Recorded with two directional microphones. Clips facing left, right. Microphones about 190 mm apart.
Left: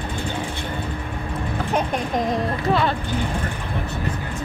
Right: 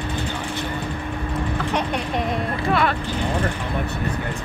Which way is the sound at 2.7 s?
30° left (ahead or behind).